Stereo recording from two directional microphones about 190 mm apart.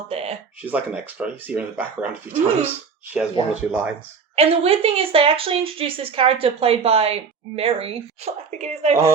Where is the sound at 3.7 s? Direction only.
5° right (ahead or behind).